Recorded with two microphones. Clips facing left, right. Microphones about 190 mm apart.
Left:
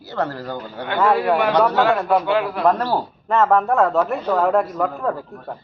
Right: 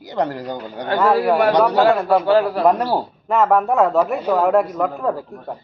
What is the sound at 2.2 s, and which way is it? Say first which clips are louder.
Speech: right 5 dB; 35° right (ahead or behind).